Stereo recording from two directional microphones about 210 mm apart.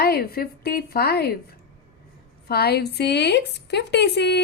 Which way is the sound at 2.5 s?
50° left (ahead or behind).